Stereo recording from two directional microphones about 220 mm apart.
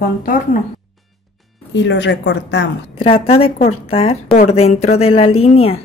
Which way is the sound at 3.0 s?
25° left (ahead or behind).